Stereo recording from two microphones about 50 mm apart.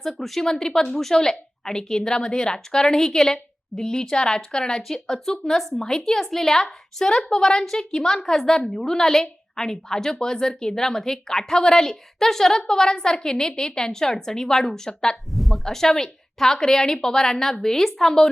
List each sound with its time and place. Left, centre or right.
0.0 s a woman's voice: centre
15.1 s a woman's voice: centre